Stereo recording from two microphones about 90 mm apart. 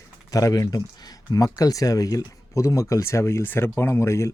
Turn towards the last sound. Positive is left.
turn(degrees=30)  # may be behind; listen again after turning